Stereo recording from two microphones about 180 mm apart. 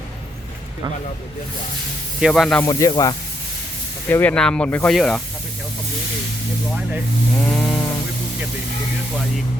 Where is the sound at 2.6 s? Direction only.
20° left (ahead or behind); by 5.2 s centre (ahead or behind).